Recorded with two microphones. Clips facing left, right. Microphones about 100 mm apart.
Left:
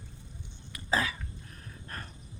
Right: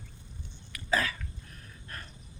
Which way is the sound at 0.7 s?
25° left (ahead or behind).